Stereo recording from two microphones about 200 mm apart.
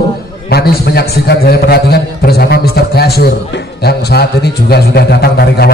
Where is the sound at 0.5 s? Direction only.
50° left (ahead or behind).